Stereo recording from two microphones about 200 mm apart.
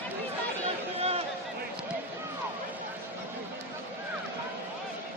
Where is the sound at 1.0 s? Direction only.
30° right (ahead or behind).